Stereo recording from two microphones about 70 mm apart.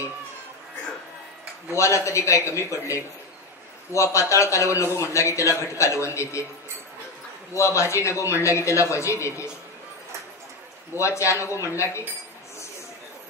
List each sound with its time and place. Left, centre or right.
1.7 s a man's voice: left
7.5 s a man's voice: left
11.0 s a man's voice: left